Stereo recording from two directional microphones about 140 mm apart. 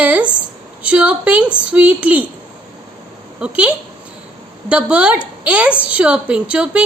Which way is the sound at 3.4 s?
10° right (ahead or behind).